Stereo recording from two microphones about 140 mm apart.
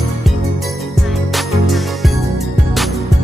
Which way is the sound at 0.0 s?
Centre (ahead or behind).